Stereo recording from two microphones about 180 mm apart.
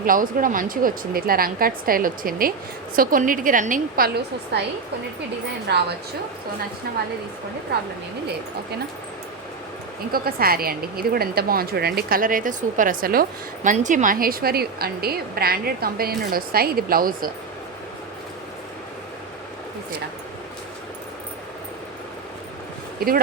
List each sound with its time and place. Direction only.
0.0 s a woman's voice: 50° right (ahead or behind)
5.6 s a woman's voice: 65° right (ahead or behind)
10.1 s a woman's voice: 55° right (ahead or behind)
23.0 s speech: 55° right (ahead or behind)